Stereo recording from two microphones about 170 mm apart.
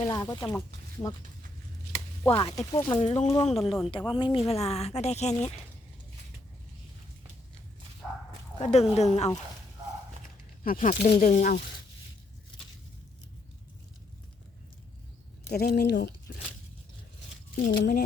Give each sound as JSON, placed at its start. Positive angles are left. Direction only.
{"t": 0.1, "sound": "speech", "side_deg": 25}
{"t": 2.3, "sound": "speech", "side_deg": 25}
{"t": 3.0, "sound": "speech", "side_deg": 40}
{"t": 3.4, "sound": "speech", "side_deg": 0}
{"t": 4.2, "sound": "speech", "side_deg": 30}
{"t": 8.6, "sound": "speech", "side_deg": 40}
{"t": 10.6, "sound": "speech", "side_deg": 50}
{"t": 15.5, "sound": "speech", "side_deg": 70}
{"t": 17.5, "sound": "speech", "side_deg": 65}